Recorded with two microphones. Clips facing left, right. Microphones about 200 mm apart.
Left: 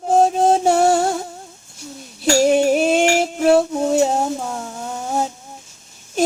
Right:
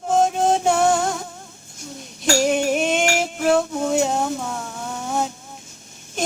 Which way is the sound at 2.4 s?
35° left (ahead or behind).